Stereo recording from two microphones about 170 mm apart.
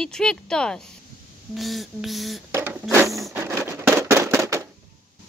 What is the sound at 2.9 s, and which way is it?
Printer, 15° right (ahead or behind).